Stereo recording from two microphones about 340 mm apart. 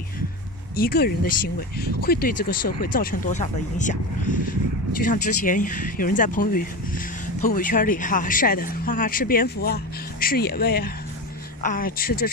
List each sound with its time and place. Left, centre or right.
0.7 s speech: left